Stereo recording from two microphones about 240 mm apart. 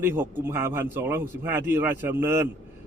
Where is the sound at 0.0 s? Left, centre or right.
Centre.